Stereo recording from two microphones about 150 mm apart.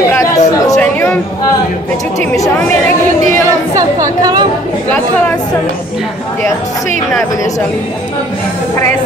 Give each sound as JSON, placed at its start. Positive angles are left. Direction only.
{"t": 0.1, "sound": "chatter", "side_deg": 20}
{"t": 0.7, "sound": "chatter", "side_deg": 10}
{"t": 3.7, "sound": "a woman's voice", "side_deg": -25}